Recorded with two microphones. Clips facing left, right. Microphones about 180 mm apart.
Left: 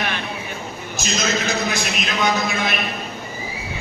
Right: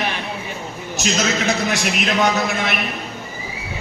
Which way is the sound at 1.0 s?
80° right.